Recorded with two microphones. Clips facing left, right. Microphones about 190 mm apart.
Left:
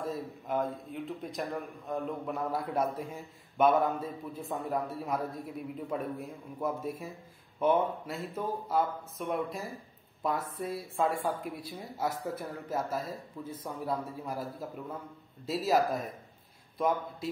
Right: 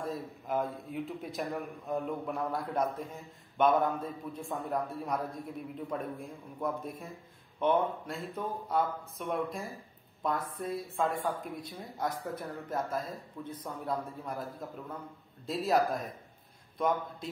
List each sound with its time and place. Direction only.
0.0 s a man's voice: centre (ahead or behind)